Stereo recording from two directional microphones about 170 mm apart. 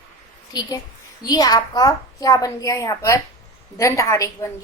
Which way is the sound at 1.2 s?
20° left (ahead or behind).